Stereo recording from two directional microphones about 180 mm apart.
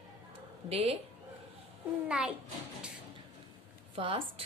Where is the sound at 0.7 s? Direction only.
35° right (ahead or behind).